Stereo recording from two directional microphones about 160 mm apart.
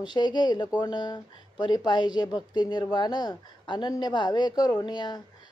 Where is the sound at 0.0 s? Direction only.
30° left (ahead or behind).